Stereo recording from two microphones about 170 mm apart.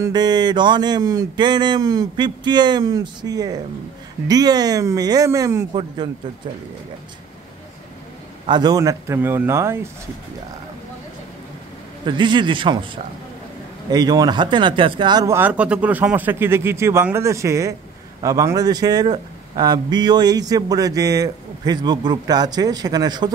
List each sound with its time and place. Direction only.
0.0 s speech: 25° right (ahead or behind)
8.5 s speech: 25° right (ahead or behind)
12.1 s speech: 25° right (ahead or behind)